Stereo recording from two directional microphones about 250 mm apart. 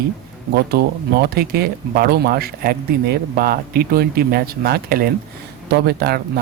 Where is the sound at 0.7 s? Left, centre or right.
Right.